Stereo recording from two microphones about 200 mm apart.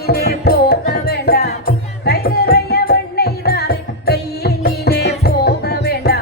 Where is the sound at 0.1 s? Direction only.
50° left (ahead or behind).